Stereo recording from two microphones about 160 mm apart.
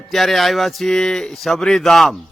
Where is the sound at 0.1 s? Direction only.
Centre (ahead or behind).